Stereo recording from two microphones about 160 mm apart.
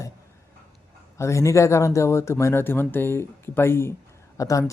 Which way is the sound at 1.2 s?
20° left (ahead or behind).